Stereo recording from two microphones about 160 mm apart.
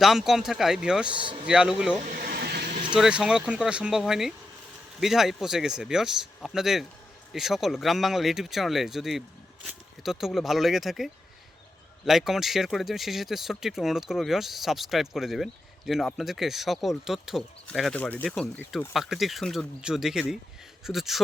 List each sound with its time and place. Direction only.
0.0 s speech: centre (ahead or behind)
1.1 s a man's voice: 30° right (ahead or behind)
1.5 s speech: 5° right (ahead or behind)
2.0 s a sound: 65° right (ahead or behind)
2.9 s speech: 5° right (ahead or behind)